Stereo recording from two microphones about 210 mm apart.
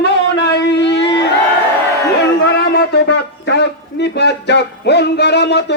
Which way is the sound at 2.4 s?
50° left (ahead or behind).